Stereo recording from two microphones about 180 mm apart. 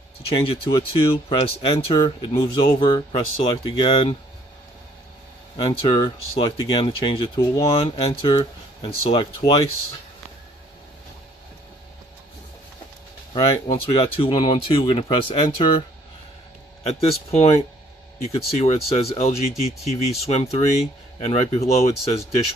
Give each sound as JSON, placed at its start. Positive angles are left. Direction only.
{"t": 0.3, "sound": "speech", "side_deg": 30}
{"t": 5.5, "sound": "speech", "side_deg": 30}
{"t": 7.7, "sound": "speech", "side_deg": 30}
{"t": 13.3, "sound": "speech", "side_deg": 30}
{"t": 16.8, "sound": "speech", "side_deg": 35}